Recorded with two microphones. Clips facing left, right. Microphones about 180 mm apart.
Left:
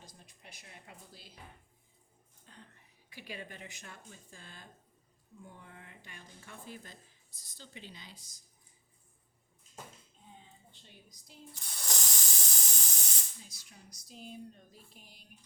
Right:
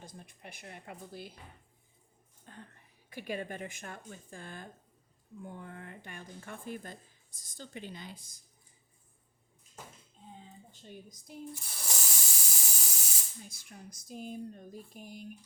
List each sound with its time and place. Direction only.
0.0 s speech: 55° right (ahead or behind)
2.5 s speech: 55° right (ahead or behind)
10.7 s speech: 45° right (ahead or behind)
11.5 s spray: 5° right (ahead or behind)
13.4 s speech: 55° right (ahead or behind)